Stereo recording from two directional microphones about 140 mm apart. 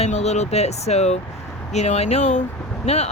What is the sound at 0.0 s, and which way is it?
Speech, 50° left (ahead or behind).